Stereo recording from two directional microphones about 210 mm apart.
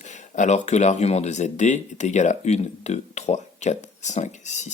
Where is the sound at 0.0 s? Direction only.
35° left (ahead or behind).